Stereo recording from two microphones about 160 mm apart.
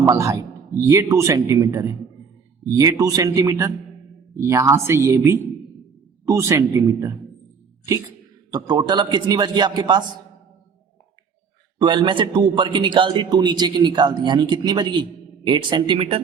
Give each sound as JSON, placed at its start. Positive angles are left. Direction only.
{"t": 0.0, "sound": "a man's voice", "side_deg": -20}
{"t": 8.4, "sound": "a man's voice", "side_deg": -25}
{"t": 11.8, "sound": "a man's voice", "side_deg": -30}